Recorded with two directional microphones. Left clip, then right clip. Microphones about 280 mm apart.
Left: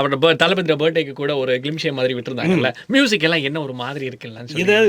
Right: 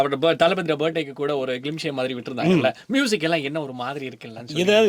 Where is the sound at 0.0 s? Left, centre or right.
Left.